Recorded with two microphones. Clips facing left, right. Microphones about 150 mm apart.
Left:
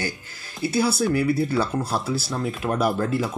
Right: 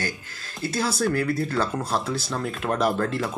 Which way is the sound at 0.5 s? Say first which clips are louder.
Left 4 dB; 10° left (ahead or behind).